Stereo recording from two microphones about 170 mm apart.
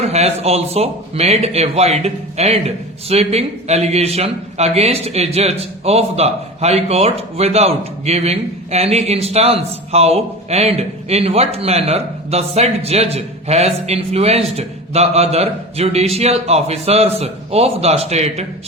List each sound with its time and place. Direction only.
0.0 s speech: 40° right (ahead or behind)